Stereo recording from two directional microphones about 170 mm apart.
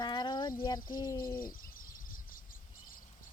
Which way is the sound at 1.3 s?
55° left (ahead or behind).